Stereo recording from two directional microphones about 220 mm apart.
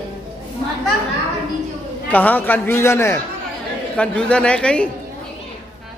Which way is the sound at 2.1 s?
5° left (ahead or behind).